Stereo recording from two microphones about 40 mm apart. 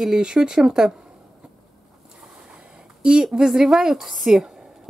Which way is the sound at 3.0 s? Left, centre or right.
Right.